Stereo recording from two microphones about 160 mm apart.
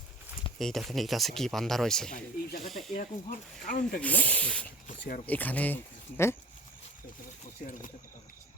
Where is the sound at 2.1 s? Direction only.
65° left (ahead or behind).